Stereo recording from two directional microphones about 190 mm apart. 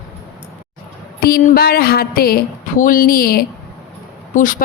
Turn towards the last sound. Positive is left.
turn(degrees=45)  # may be behind; listen again after turning